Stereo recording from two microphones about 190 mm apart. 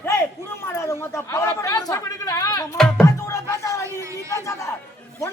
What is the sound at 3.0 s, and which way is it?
Music, 15° left (ahead or behind).